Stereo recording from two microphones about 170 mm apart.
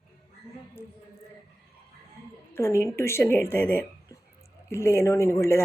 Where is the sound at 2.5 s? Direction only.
15° left (ahead or behind).